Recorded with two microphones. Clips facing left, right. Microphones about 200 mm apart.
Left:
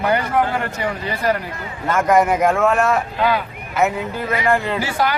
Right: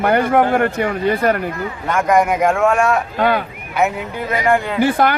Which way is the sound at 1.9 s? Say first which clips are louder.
Even; centre (ahead or behind).